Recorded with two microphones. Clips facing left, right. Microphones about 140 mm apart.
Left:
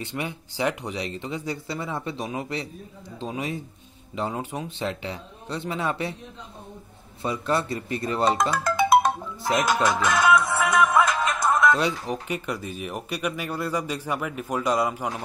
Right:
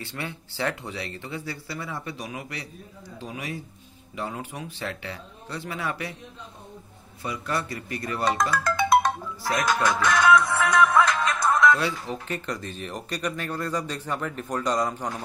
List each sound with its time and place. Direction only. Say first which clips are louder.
0.0 s speech: left 4 dB; 15° left (ahead or behind)
7.2 s speech: left 4 dB; 25° left (ahead or behind)
10.8 s music: right 1 dB; 25° left (ahead or behind)
11.4 s speech: even; 20° left (ahead or behind)